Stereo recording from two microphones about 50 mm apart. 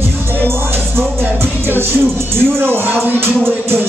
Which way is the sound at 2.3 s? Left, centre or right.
Right.